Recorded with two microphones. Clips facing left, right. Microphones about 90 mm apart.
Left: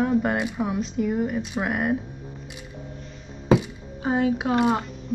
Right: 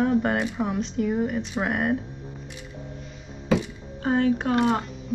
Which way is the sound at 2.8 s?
Centre (ahead or behind).